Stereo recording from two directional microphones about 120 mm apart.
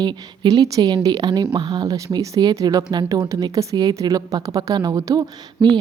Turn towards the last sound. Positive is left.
turn(degrees=-35)  # may be behind; listen again after turning